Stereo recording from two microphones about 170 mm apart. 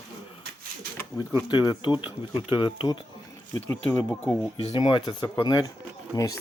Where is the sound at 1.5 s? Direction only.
25° left (ahead or behind).